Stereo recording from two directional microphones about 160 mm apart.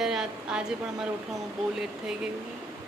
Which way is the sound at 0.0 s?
5° right (ahead or behind).